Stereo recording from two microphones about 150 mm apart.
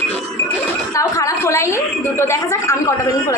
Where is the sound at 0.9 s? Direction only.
20° left (ahead or behind).